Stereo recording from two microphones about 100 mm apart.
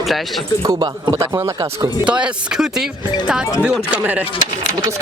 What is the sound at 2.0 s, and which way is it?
Speech, 10° right (ahead or behind).